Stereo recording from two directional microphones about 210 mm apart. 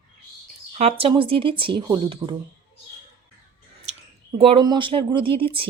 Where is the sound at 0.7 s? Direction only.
30° right (ahead or behind).